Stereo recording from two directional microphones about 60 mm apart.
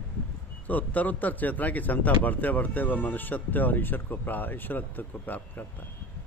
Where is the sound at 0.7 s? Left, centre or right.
Left.